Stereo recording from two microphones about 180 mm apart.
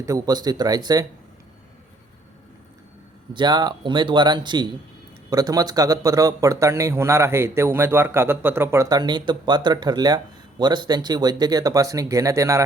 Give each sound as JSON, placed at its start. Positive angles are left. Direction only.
{"t": 0.0, "sound": "speech", "side_deg": -20}
{"t": 3.3, "sound": "a man's voice", "side_deg": -25}